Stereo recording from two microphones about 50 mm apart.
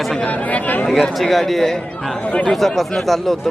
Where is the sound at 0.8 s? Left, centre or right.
Centre.